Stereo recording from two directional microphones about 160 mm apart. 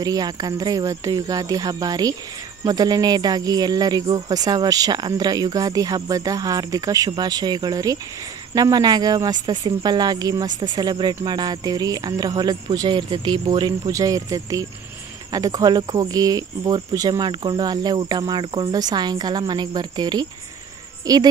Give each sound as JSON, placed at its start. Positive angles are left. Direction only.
{"t": 0.0, "sound": "speech", "side_deg": -25}